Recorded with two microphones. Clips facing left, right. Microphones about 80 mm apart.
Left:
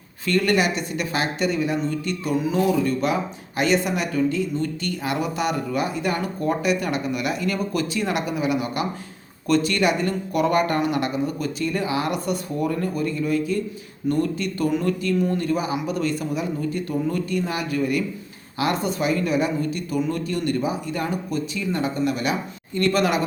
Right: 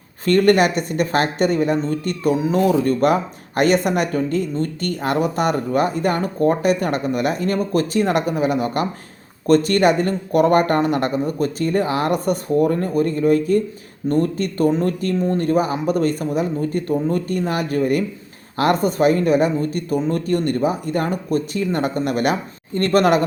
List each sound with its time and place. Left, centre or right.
0.3 s speech: right